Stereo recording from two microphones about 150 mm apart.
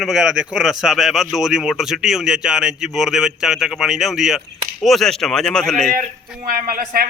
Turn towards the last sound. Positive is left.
turn(degrees=-75)  # may be behind; listen again after turning